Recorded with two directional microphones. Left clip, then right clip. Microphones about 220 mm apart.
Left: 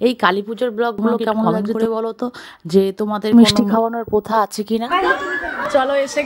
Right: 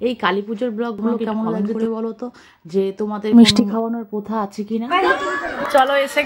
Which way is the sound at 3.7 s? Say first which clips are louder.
Left 6 dB; 50° left (ahead or behind).